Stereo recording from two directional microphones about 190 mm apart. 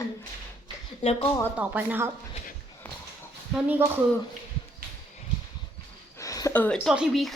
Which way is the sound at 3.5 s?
10° right (ahead or behind).